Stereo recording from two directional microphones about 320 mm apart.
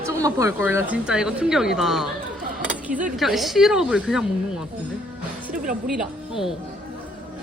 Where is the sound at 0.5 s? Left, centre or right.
Centre.